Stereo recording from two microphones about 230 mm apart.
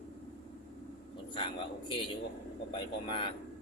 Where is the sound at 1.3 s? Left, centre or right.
Left.